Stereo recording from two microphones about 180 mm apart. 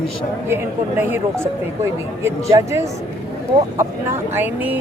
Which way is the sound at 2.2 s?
15° right (ahead or behind).